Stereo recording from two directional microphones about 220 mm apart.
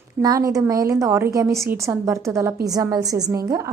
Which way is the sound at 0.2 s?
15° right (ahead or behind).